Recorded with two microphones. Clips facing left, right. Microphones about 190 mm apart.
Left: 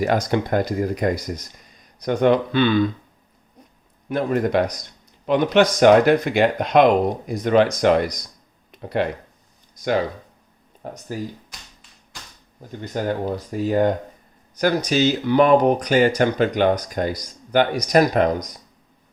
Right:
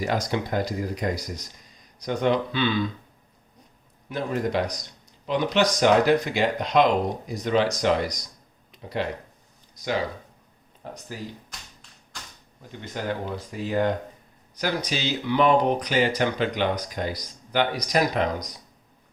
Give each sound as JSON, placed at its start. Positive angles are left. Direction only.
{"t": 0.0, "sound": "speech", "side_deg": 55}
{"t": 4.1, "sound": "speech", "side_deg": 55}
{"t": 8.7, "sound": "a sound", "side_deg": 55}
{"t": 9.7, "sound": "speech", "side_deg": 50}
{"t": 11.1, "sound": "speech", "side_deg": 45}
{"t": 12.8, "sound": "speech", "side_deg": 40}